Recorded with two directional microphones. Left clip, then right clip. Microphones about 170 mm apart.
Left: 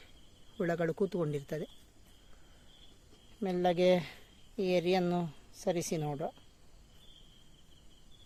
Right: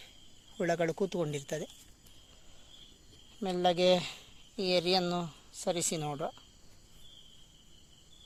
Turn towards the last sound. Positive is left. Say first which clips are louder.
# right 1 dB
turn(degrees=15)  # may be behind; listen again after turning